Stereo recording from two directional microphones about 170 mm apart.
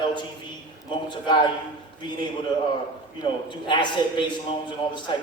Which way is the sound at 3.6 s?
25° left (ahead or behind).